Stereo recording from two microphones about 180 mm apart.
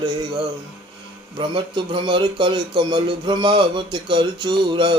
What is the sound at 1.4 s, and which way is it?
A man's voice, 25° right (ahead or behind).